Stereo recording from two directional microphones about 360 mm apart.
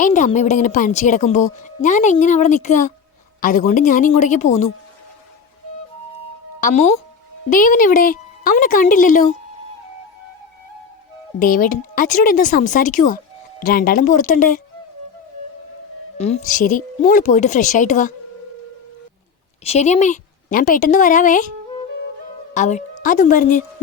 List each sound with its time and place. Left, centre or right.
0.0 s a woman's voice: centre
6.6 s a woman's voice: centre
11.3 s a woman's voice: left
16.1 s a woman's voice: centre
19.6 s a woman's voice: centre
22.5 s a woman's voice: centre